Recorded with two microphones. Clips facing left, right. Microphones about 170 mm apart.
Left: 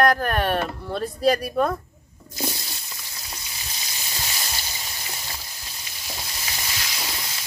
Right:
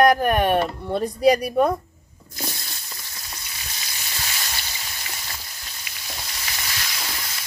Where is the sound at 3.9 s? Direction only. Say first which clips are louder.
Even; 15° left (ahead or behind).